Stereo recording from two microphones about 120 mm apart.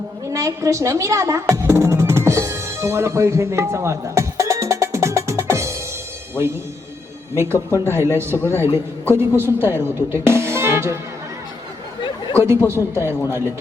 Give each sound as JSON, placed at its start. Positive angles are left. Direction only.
{"t": 0.3, "sound": "music", "side_deg": -25}
{"t": 7.3, "sound": "speech", "side_deg": -20}
{"t": 12.3, "sound": "speech", "side_deg": -20}